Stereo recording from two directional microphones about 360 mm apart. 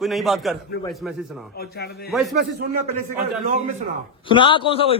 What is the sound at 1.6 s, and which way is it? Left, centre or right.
Speech, left.